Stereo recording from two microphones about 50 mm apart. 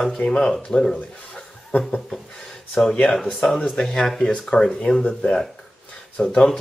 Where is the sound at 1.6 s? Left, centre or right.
Left.